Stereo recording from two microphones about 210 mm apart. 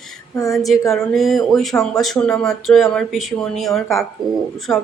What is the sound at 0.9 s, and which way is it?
Speech, centre (ahead or behind).